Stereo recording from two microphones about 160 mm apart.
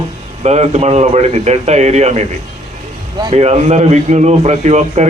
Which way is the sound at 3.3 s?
40° right (ahead or behind).